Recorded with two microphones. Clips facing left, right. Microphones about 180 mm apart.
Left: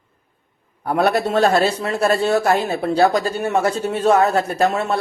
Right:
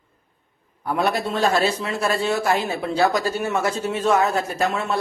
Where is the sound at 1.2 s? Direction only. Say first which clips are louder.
Left 4 dB; 45° left (ahead or behind).